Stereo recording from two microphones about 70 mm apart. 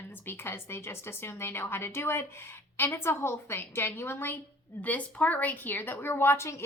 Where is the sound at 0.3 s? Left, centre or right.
Left.